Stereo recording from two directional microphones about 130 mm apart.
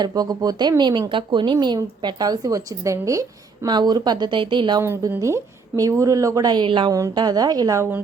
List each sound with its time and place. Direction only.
0.0 s speech: 30° right (ahead or behind)
4.8 s speech: 20° right (ahead or behind)